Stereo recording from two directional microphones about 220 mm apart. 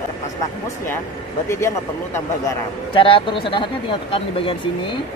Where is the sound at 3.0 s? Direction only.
25° left (ahead or behind).